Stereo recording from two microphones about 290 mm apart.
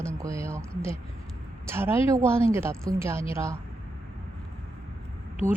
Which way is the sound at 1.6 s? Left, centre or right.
Centre.